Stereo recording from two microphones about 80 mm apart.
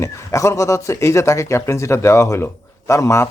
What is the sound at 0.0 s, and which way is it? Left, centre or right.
Speech, left.